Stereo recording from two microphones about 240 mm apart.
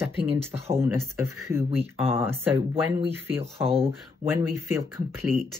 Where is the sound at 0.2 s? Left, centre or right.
Right.